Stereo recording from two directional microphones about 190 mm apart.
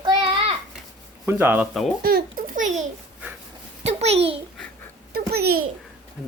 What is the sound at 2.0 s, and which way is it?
A child's voice, 50° right (ahead or behind).